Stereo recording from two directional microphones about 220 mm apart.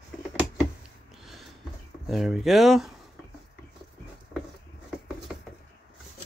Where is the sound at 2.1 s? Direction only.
Centre (ahead or behind).